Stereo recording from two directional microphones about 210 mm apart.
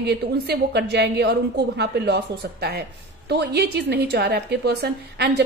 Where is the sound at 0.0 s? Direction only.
50° right (ahead or behind).